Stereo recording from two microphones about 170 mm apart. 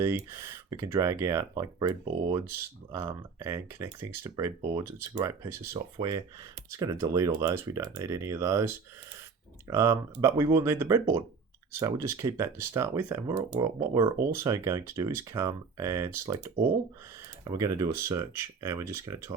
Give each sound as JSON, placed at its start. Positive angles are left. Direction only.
{"t": 0.0, "sound": "speech", "side_deg": -15}
{"t": 2.9, "sound": "speech", "side_deg": -15}